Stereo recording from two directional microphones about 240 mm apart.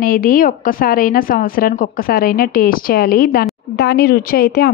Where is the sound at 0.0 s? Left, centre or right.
Left.